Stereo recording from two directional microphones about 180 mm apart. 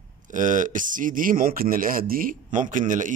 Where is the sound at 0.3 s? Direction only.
45° right (ahead or behind).